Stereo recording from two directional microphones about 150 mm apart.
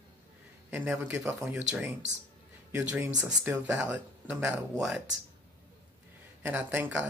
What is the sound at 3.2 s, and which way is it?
Speech, 20° right (ahead or behind).